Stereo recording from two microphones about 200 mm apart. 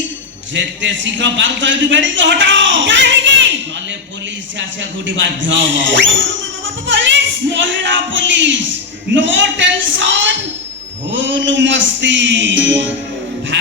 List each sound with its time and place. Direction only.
0.5 s a man's voice: 65° right (ahead or behind)
4.8 s a man's voice: 65° right (ahead or behind)
13.5 s music: 65° right (ahead or behind)